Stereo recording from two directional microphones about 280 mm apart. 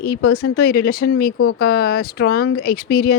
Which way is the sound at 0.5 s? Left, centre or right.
Left.